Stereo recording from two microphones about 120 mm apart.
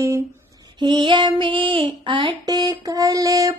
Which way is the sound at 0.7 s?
40° right (ahead or behind).